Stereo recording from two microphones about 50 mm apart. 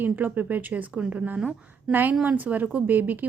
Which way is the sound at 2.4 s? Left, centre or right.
Right.